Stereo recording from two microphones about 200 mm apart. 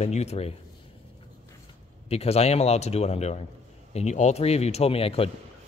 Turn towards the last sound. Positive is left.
turn(degrees=30)  # may be behind; listen again after turning